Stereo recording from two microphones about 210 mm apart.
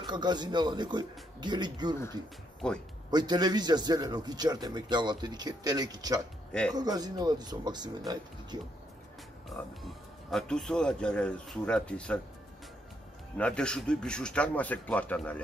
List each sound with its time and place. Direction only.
0.0 s a man's voice: 20° right (ahead or behind)
2.6 s speech: 5° left (ahead or behind)
3.1 s a man's voice: 20° right (ahead or behind)
9.5 s speech: centre (ahead or behind)
13.4 s speech: 5° left (ahead or behind)